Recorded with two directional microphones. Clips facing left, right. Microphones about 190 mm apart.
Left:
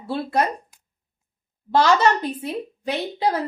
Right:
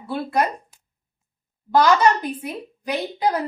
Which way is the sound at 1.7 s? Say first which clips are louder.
Right 1 dB; 25° left (ahead or behind).